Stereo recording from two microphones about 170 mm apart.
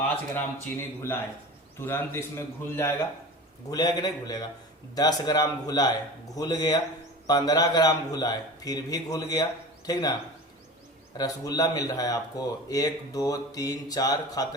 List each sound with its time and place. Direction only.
0.1 s a man's voice: 15° left (ahead or behind)
11.2 s speech: 20° left (ahead or behind)